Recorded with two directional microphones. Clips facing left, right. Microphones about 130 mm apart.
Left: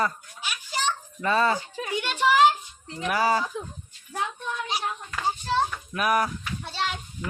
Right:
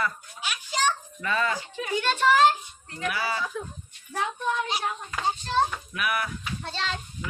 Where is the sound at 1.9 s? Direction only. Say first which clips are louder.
Even; 15° left (ahead or behind).